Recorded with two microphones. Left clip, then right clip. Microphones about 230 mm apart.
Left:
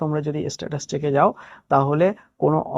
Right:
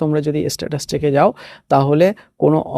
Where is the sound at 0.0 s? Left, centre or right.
Right.